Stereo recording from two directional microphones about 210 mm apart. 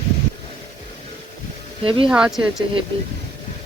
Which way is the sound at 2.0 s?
5° right (ahead or behind).